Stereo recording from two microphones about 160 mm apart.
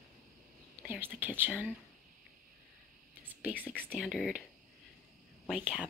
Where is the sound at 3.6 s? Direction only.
10° left (ahead or behind).